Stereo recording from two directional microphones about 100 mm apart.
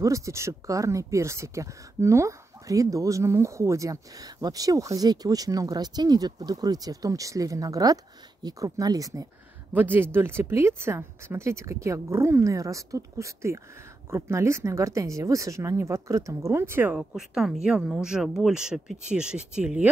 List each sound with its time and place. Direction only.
0.0 s speech: 30° right (ahead or behind)
9.8 s speech: 20° right (ahead or behind)
16.9 s speech: 5° right (ahead or behind)